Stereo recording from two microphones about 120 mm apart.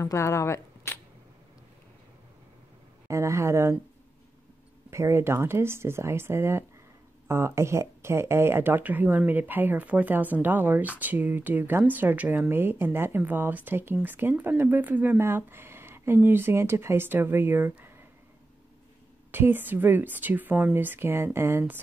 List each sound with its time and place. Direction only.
0.0 s speech: 25° left (ahead or behind)
3.1 s speech: 25° right (ahead or behind)
4.9 s speech: 20° right (ahead or behind)
19.3 s speech: 15° right (ahead or behind)